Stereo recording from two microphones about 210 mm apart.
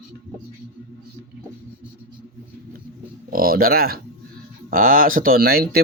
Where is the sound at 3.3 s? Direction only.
45° right (ahead or behind).